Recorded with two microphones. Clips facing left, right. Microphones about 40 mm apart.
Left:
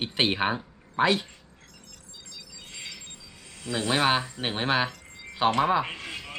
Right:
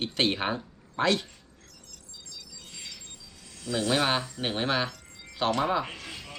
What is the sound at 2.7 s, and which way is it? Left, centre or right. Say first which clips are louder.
Music: left 4 dB; left.